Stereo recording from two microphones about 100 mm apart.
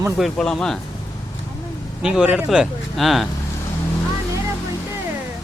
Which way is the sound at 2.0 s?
10° right (ahead or behind).